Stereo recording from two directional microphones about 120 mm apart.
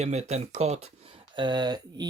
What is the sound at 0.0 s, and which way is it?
Speech, 65° right (ahead or behind).